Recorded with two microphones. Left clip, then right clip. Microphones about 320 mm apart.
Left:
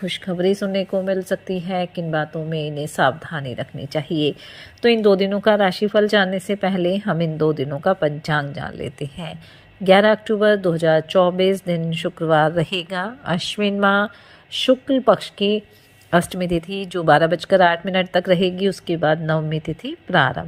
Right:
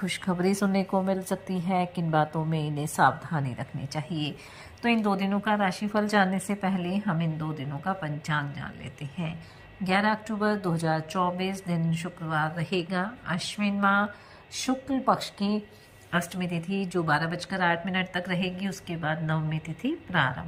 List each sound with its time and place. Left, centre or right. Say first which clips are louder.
0.0 s a woman's voice: left 7 dB; centre
4.1 s speech: left 14 dB; centre
5.3 s a woman's voice: left 10 dB; centre